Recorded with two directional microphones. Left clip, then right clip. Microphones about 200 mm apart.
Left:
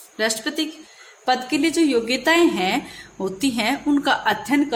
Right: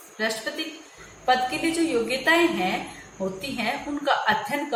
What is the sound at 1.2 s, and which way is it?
A woman's voice, 50° left (ahead or behind).